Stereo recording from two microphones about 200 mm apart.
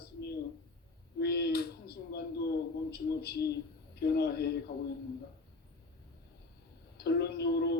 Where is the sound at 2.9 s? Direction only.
50° left (ahead or behind).